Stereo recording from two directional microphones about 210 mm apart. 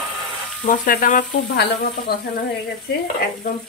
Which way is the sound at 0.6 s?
40° left (ahead or behind).